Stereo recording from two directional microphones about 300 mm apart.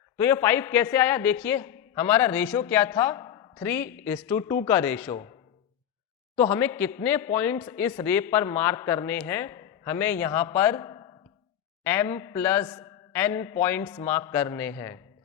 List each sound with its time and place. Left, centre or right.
0.2 s a man's voice: centre
6.3 s a man's voice: centre